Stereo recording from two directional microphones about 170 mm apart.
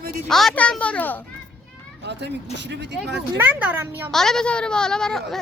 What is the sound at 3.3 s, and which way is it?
Speech, 10° right (ahead or behind).